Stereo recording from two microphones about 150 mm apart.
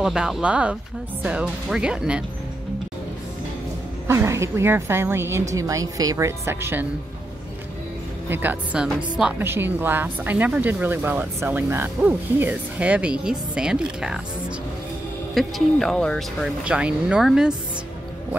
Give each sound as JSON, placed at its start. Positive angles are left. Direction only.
{"t": 0.0, "sound": "speech", "side_deg": -5}
{"t": 4.1, "sound": "a woman's voice", "side_deg": -20}
{"t": 8.3, "sound": "speech", "side_deg": -10}
{"t": 15.3, "sound": "speech", "side_deg": 0}
{"t": 16.6, "sound": "speech", "side_deg": -5}